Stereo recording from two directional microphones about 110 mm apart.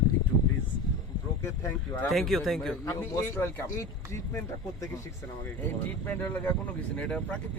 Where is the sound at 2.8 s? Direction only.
25° left (ahead or behind).